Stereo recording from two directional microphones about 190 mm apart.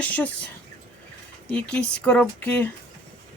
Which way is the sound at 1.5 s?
5° left (ahead or behind).